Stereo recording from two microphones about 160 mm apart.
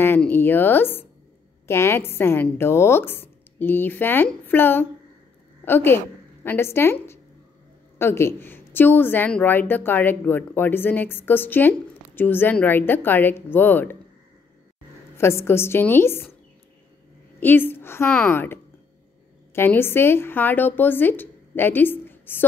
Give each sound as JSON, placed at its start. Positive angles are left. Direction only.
{"t": 0.0, "sound": "a woman's voice", "side_deg": 15}
{"t": 15.1, "sound": "a woman's voice", "side_deg": 15}
{"t": 17.4, "sound": "a woman's voice", "side_deg": 15}